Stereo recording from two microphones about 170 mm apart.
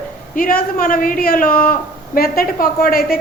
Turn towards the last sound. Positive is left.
turn(degrees=60)  # may be behind; listen again after turning